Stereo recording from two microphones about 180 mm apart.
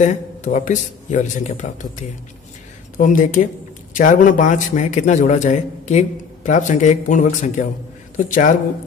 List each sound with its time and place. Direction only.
0.0 s a man's voice: 40° left (ahead or behind)